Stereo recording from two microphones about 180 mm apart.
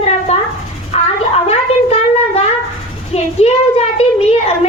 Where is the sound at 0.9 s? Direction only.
35° left (ahead or behind).